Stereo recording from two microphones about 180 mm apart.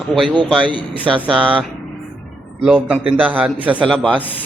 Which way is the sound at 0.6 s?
25° right (ahead or behind).